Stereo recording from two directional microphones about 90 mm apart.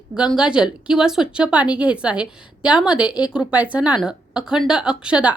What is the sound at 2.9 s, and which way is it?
Speech, 50° left (ahead or behind).